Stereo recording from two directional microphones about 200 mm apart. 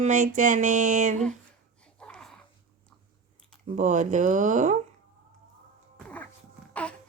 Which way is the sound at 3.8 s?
35° right (ahead or behind).